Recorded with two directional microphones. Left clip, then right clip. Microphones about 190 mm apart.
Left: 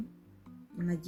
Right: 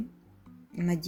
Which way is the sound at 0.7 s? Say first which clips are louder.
Right 5 dB; 40° right (ahead or behind).